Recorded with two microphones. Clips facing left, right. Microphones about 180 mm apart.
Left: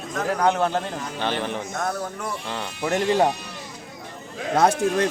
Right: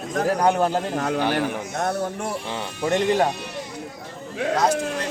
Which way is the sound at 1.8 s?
30° right (ahead or behind).